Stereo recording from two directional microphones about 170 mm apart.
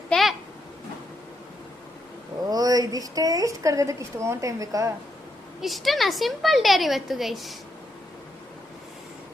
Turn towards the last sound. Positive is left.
turn(degrees=0)  # may be behind; listen again after turning